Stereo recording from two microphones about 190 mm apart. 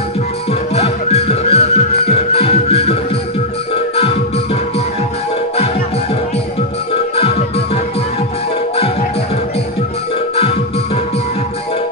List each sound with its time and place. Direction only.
0.5 s music: 35° left (ahead or behind)
7.2 s music: 30° left (ahead or behind)
10.3 s music: 30° left (ahead or behind)